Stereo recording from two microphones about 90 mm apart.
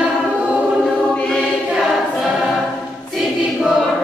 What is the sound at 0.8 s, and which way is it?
Choir, 10° left (ahead or behind).